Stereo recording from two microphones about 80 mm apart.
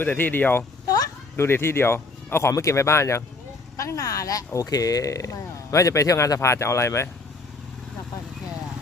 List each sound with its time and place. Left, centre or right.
0.0 s speech: left
0.9 s a sound: left
1.4 s speech: left